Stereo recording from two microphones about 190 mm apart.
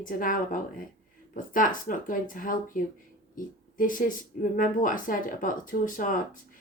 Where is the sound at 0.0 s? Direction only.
45° left (ahead or behind).